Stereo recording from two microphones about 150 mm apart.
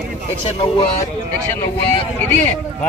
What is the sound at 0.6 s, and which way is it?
Speech, 40° left (ahead or behind).